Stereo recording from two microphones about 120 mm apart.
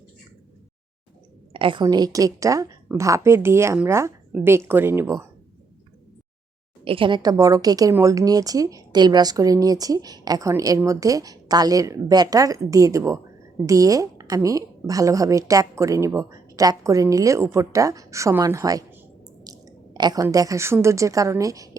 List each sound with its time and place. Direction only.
1.5 s a woman's voice: 45° right (ahead or behind); by 5.3 s 25° right (ahead or behind)
6.8 s a woman's voice: 45° right (ahead or behind); by 18.9 s 30° right (ahead or behind)
19.5 s a sound: 35° right (ahead or behind)
20.3 s a woman's voice: 30° right (ahead or behind)